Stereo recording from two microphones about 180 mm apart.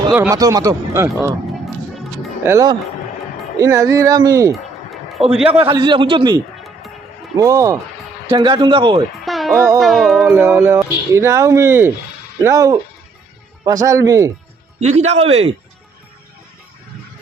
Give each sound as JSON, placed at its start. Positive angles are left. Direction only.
{"t": 0.1, "sound": "speech", "side_deg": -15}
{"t": 1.6, "sound": "music", "side_deg": 0}
{"t": 2.4, "sound": "speech", "side_deg": -15}
{"t": 4.5, "sound": "a sound", "side_deg": 0}
{"t": 5.5, "sound": "speech", "side_deg": -30}
{"t": 6.6, "sound": "music", "side_deg": 0}
{"t": 7.3, "sound": "speech", "side_deg": -20}
{"t": 9.2, "sound": "music", "side_deg": 0}
{"t": 9.6, "sound": "speech", "side_deg": -15}
{"t": 9.8, "sound": "music", "side_deg": 0}
{"t": 10.3, "sound": "speech", "side_deg": -10}
{"t": 14.8, "sound": "speech", "side_deg": -40}